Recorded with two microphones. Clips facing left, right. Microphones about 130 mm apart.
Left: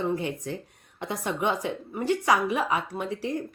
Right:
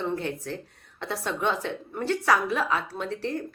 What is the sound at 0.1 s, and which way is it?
A woman's voice, 15° left (ahead or behind).